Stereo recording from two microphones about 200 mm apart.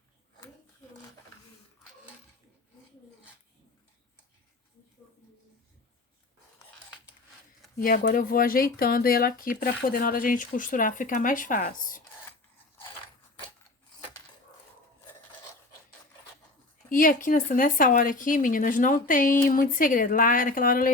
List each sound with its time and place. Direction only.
7.8 s speech: 45° left (ahead or behind)
16.9 s speech: 45° left (ahead or behind)